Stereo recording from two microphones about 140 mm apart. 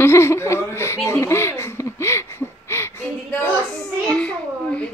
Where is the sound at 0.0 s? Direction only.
20° left (ahead or behind).